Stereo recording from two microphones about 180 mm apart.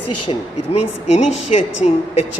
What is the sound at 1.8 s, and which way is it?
Speech, 35° left (ahead or behind).